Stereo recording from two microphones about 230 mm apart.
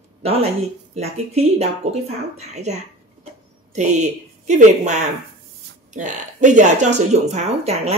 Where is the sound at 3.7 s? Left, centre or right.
Right.